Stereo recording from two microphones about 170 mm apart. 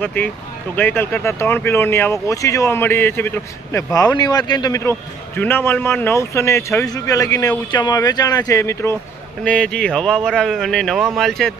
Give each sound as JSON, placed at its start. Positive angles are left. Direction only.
{"t": 0.0, "sound": "speech", "side_deg": 10}
{"t": 9.4, "sound": "speech", "side_deg": 5}